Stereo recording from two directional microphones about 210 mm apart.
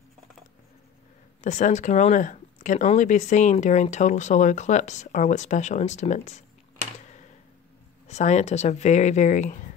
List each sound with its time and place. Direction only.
1.4 s speech: 35° left (ahead or behind)
8.1 s speech: 35° left (ahead or behind)